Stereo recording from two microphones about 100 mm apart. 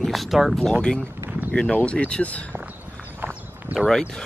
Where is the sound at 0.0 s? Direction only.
Centre (ahead or behind).